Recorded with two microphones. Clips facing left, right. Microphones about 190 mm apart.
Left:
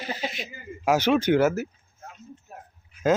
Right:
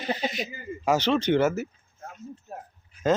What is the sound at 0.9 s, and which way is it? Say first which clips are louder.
Speech: left 2 dB; 10° left (ahead or behind).